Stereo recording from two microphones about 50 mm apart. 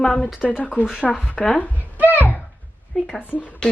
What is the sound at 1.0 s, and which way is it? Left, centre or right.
Speech, centre.